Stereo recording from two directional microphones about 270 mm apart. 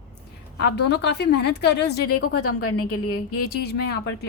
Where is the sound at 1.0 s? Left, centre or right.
Left.